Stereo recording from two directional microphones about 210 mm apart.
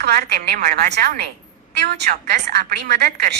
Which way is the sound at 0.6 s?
35° right (ahead or behind).